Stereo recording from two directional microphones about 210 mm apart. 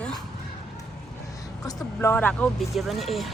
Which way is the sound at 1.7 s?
15° left (ahead or behind).